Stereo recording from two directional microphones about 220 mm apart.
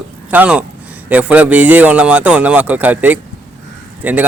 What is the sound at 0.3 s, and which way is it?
Speech, 5° right (ahead or behind).